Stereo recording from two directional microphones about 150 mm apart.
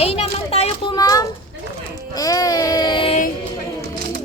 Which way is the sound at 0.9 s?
25° left (ahead or behind).